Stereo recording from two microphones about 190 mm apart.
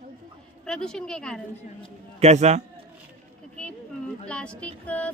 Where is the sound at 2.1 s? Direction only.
35° right (ahead or behind).